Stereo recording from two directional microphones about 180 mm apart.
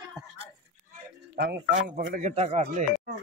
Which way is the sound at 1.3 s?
65° right (ahead or behind).